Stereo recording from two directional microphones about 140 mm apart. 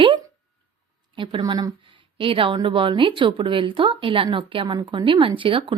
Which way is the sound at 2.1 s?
40° right (ahead or behind).